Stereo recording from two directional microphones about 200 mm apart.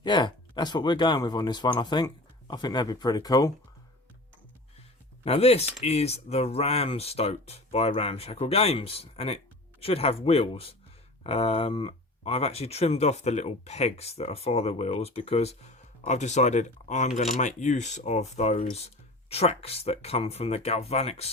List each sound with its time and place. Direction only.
0.0 s speech: 20° left (ahead or behind)
5.2 s speech: 30° left (ahead or behind)